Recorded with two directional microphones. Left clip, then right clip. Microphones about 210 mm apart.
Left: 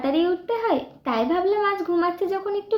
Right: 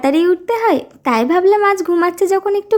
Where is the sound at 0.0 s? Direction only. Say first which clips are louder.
Right 8 dB; 50° right (ahead or behind).